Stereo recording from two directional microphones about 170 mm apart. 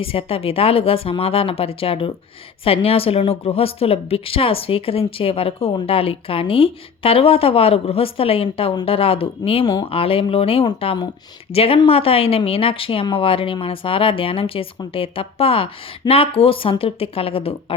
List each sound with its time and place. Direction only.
0.0 s a woman's voice: 35° left (ahead or behind)